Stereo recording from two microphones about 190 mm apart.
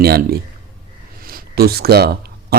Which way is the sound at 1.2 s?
50° right (ahead or behind).